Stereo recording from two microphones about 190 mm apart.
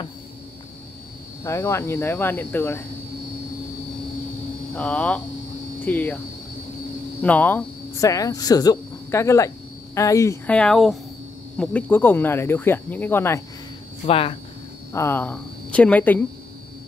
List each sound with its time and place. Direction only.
1.4 s speech: 15° left (ahead or behind)
4.7 s speech: 5° left (ahead or behind)
7.2 s speech: 10° left (ahead or behind)
14.0 s speech: 30° left (ahead or behind)
14.9 s a woman's voice: 15° left (ahead or behind)